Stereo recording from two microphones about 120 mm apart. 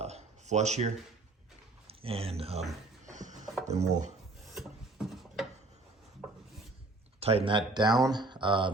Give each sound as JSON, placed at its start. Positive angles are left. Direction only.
{"t": 0.0, "sound": "a sound", "side_deg": -65}
{"t": 1.9, "sound": "speech", "side_deg": -55}
{"t": 3.1, "sound": "a sound", "side_deg": -90}
{"t": 3.7, "sound": "speech", "side_deg": -75}
{"t": 4.4, "sound": "wood", "side_deg": -5}
{"t": 7.2, "sound": "speech", "side_deg": -55}